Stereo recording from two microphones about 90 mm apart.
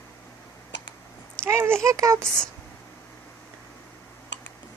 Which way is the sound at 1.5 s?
25° right (ahead or behind).